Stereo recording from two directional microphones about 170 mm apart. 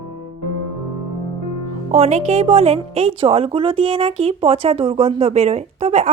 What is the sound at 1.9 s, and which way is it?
A woman's voice, 40° right (ahead or behind).